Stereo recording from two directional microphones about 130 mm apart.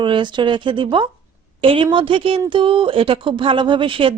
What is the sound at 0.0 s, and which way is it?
A woman's voice, 40° right (ahead or behind).